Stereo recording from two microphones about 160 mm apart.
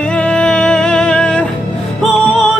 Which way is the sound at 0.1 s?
5° left (ahead or behind).